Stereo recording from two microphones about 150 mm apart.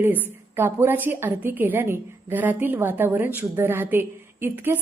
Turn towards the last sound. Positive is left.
turn(degrees=-15)  # may be behind; listen again after turning